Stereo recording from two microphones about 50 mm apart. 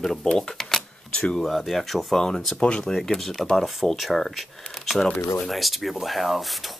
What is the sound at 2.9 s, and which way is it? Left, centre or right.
Speech, centre.